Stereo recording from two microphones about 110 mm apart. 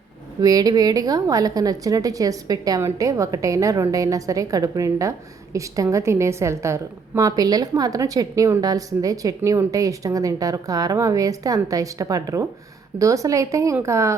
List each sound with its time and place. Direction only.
0.4 s a woman's voice: 35° right (ahead or behind)